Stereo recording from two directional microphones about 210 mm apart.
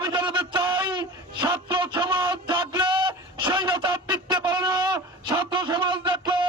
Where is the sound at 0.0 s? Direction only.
20° right (ahead or behind).